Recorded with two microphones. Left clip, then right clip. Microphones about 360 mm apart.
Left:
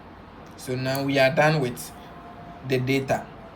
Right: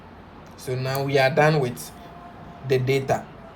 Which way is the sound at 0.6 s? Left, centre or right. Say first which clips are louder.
Even; centre.